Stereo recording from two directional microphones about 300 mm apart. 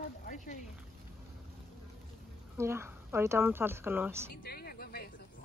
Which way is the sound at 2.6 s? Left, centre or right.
Centre.